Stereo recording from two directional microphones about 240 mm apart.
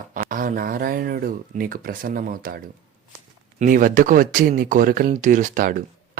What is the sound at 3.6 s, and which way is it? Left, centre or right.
Speech, right.